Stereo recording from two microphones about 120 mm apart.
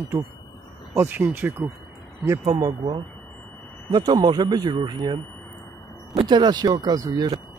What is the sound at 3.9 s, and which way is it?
Speech, 35° right (ahead or behind).